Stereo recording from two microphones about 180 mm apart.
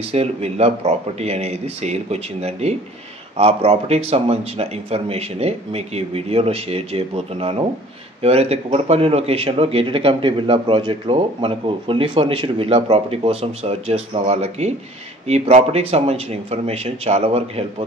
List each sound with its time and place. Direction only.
0.1 s speech: 35° right (ahead or behind)